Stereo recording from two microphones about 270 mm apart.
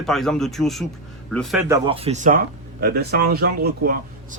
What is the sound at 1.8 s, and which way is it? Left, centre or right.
Speech, right.